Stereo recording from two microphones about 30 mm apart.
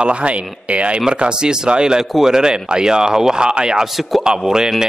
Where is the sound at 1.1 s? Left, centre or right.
Right.